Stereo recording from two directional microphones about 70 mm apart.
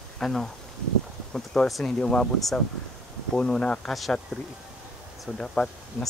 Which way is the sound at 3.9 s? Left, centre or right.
Centre.